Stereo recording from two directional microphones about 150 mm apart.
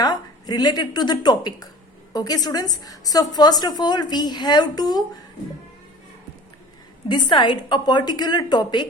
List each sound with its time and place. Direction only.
0.0 s a woman's voice: 25° left (ahead or behind)
7.1 s a woman's voice: 30° left (ahead or behind)